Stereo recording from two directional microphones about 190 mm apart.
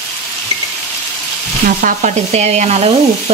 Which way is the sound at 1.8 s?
40° right (ahead or behind).